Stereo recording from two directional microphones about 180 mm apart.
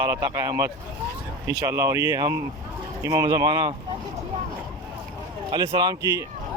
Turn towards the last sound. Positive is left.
turn(degrees=-20)  # may be behind; listen again after turning